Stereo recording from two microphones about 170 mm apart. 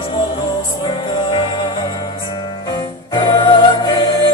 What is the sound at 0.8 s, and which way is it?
Music, 30° left (ahead or behind).